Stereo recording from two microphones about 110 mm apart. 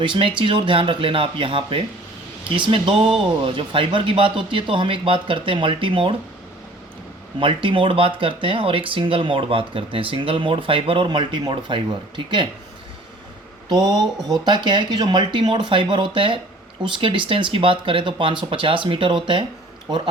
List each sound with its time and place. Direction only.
0.0 s speech: 50° right (ahead or behind)
7.3 s speech: 50° right (ahead or behind)
13.7 s speech: 40° right (ahead or behind)